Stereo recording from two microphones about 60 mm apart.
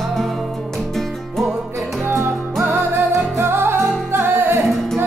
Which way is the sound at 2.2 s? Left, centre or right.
Right.